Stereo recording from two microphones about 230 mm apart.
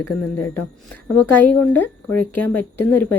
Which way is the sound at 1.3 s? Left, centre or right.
Centre.